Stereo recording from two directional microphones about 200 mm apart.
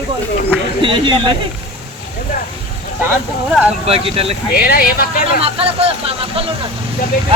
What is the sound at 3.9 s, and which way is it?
Speech, 30° right (ahead or behind).